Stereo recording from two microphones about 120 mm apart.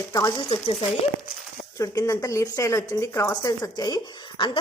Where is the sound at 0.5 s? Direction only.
45° left (ahead or behind).